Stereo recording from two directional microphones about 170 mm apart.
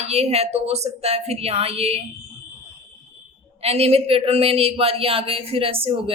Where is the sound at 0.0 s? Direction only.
40° right (ahead or behind).